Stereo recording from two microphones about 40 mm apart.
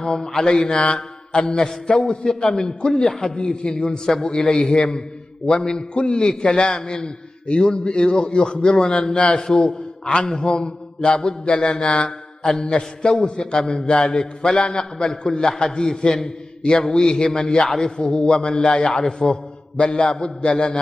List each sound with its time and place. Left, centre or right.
0.0 s a man's voice: centre
0.8 s mantra: left
1.9 s a man's voice: centre
9.4 s a man's voice: centre